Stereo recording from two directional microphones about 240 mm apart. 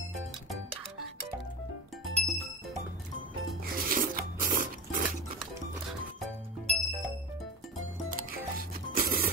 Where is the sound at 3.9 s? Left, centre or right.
Right.